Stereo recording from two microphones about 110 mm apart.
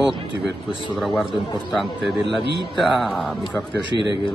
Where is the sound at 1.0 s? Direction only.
Centre (ahead or behind).